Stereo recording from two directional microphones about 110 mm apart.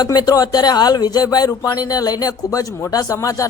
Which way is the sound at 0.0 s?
35° left (ahead or behind).